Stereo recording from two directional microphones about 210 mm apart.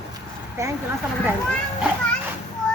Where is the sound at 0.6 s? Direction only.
15° right (ahead or behind).